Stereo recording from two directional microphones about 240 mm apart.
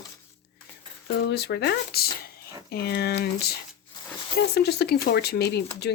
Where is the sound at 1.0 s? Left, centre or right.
Left.